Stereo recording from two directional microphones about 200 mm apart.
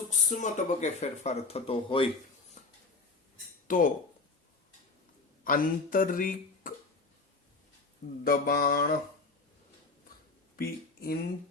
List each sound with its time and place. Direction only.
0.1 s speech: 35° left (ahead or behind)
2.6 s a sound: 35° left (ahead or behind)
3.7 s speech: 40° left (ahead or behind)
5.5 s speech: 45° left (ahead or behind)
8.2 s speech: 50° left (ahead or behind)
10.6 s speech: 50° left (ahead or behind)